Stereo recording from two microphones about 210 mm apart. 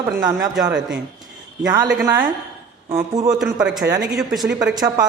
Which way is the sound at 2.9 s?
15° right (ahead or behind).